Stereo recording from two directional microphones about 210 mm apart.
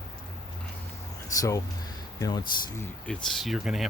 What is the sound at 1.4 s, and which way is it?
Speech, 15° left (ahead or behind).